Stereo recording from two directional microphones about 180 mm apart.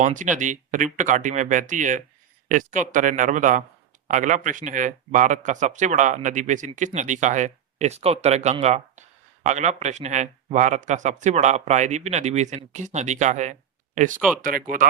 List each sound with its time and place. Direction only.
0.0 s speech: 45° right (ahead or behind)